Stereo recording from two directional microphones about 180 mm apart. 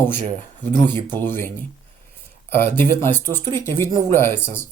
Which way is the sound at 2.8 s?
10° left (ahead or behind).